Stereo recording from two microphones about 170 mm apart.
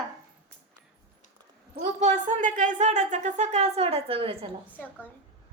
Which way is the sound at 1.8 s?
45° right (ahead or behind).